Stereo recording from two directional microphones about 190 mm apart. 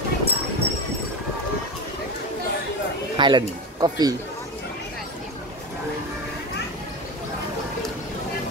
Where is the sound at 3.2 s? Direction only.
25° right (ahead or behind).